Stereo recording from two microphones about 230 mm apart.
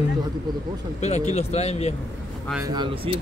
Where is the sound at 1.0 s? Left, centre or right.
Left.